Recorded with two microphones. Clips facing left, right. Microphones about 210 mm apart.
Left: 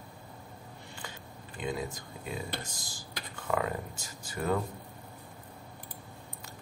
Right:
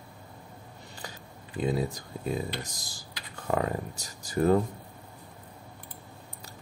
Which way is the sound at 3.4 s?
40° right (ahead or behind).